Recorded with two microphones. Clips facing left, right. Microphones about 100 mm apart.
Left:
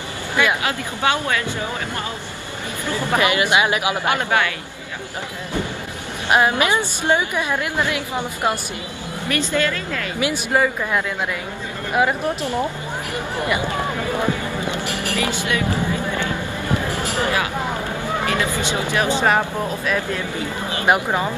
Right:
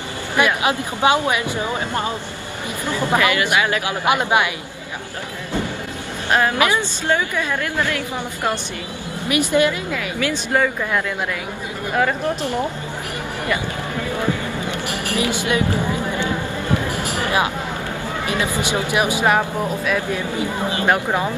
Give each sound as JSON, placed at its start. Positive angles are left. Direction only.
{"t": 0.7, "sound": "speech", "side_deg": -20}
{"t": 3.2, "sound": "speech", "side_deg": 20}
{"t": 4.0, "sound": "speech", "side_deg": -20}
{"t": 6.2, "sound": "a woman's voice", "side_deg": 15}
{"t": 9.3, "sound": "speech", "side_deg": -15}
{"t": 10.2, "sound": "a woman's voice", "side_deg": 10}
{"t": 15.1, "sound": "speech", "side_deg": -20}
{"t": 16.8, "sound": "a sound", "side_deg": -15}
{"t": 18.2, "sound": "speech", "side_deg": -20}
{"t": 20.8, "sound": "a woman's voice", "side_deg": 15}